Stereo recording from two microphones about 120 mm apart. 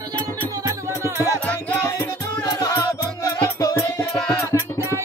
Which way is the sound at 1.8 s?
30° left (ahead or behind).